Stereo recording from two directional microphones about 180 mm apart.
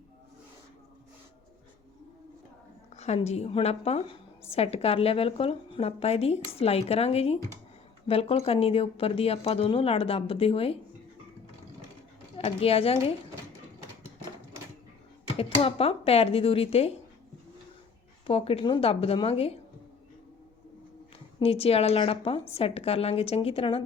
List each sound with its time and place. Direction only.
2.9 s speech: 35° left (ahead or behind)
12.4 s speech: 35° left (ahead or behind)
15.4 s speech: 30° left (ahead or behind)
18.3 s speech: 30° left (ahead or behind)
21.3 s speech: 35° left (ahead or behind)